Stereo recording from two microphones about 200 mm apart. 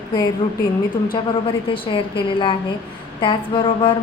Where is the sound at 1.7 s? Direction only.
25° left (ahead or behind).